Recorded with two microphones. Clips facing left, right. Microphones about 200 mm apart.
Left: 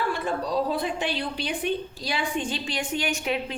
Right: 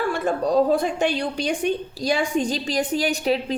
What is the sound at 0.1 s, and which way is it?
A woman's voice, 45° right (ahead or behind).